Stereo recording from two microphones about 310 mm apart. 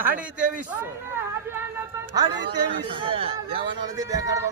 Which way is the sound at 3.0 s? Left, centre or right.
Centre.